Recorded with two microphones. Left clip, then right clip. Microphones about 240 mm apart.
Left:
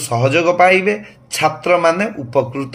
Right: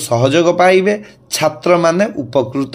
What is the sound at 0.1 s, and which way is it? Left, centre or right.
A man's voice, right.